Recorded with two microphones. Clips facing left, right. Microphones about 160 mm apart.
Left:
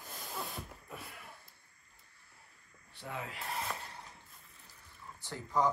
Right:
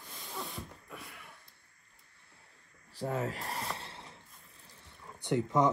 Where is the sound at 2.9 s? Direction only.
40° right (ahead or behind).